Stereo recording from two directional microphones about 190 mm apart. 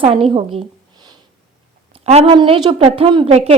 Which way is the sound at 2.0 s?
35° right (ahead or behind).